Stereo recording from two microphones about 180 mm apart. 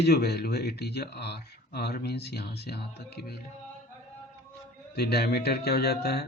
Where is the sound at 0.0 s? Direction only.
65° left (ahead or behind).